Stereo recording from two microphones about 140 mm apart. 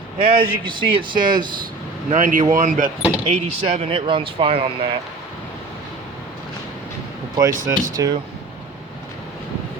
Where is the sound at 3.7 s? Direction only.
40° right (ahead or behind).